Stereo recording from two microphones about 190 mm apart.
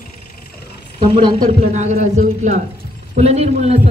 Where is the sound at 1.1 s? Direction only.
30° right (ahead or behind).